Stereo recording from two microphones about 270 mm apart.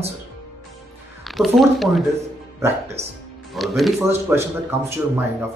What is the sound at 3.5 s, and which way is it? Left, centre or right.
Speech, centre.